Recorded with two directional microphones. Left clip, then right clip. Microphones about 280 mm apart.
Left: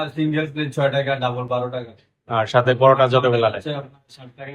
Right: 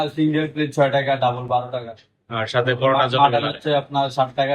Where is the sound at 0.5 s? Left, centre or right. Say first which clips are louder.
Right 3 dB; centre.